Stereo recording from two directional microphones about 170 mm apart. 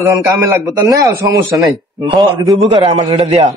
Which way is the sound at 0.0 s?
15° right (ahead or behind).